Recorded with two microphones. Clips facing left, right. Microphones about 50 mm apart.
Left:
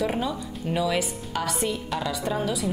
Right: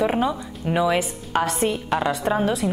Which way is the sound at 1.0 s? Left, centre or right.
Right.